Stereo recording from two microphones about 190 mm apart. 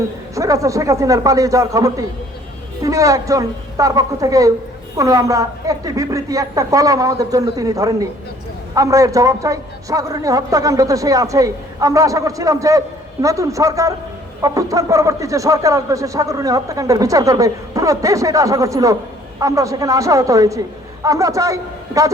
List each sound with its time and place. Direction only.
0.3 s speech: 15° right (ahead or behind)